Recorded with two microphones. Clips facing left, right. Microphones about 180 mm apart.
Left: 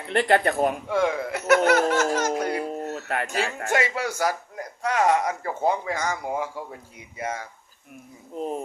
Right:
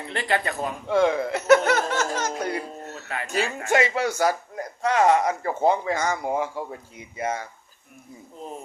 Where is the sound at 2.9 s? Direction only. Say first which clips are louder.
Left 1 dB; 55° left (ahead or behind).